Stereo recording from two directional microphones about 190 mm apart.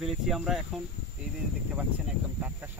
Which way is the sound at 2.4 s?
10° right (ahead or behind).